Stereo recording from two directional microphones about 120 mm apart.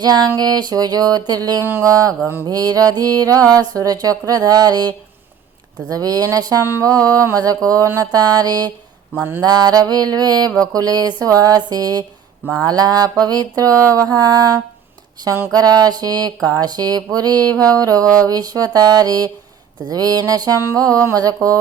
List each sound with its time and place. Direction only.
0.0 s speech: 35° right (ahead or behind)
1.6 s mantra: 20° right (ahead or behind)
2.5 s speech: 30° right (ahead or behind)
6.8 s mantra: 30° right (ahead or behind)
9.4 s speech: 35° right (ahead or behind)
15.2 s mantra: 25° right (ahead or behind)
15.5 s speech: 30° right (ahead or behind)
20.7 s mantra: 30° right (ahead or behind)